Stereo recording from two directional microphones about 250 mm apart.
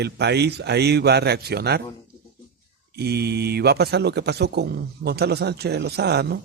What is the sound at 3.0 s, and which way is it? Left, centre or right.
A man's voice, right.